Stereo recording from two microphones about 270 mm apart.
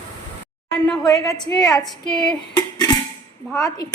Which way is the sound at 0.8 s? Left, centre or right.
Centre.